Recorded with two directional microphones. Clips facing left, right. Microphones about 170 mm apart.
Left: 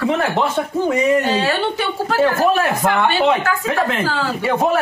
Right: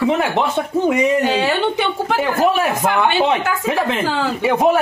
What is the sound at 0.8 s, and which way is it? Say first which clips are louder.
Speech: even; 15° right (ahead or behind).